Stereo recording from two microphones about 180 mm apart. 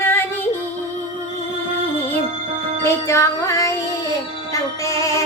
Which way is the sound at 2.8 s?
15° left (ahead or behind).